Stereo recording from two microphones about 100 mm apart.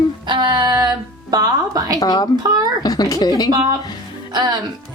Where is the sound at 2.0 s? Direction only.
40° left (ahead or behind).